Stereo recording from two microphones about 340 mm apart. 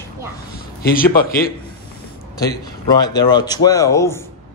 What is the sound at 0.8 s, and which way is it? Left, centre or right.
Speech, left.